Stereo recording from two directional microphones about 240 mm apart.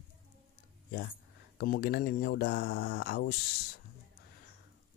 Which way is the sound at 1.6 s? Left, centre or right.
Left.